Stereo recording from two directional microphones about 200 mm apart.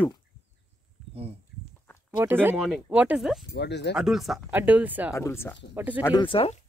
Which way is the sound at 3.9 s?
Centre (ahead or behind).